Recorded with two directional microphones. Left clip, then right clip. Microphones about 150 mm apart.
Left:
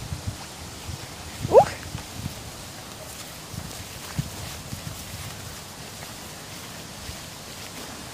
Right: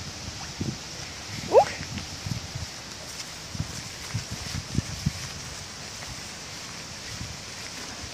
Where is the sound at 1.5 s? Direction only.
5° right (ahead or behind).